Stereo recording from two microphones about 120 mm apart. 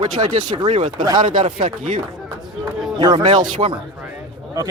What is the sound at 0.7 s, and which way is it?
Speech, 70° right (ahead or behind).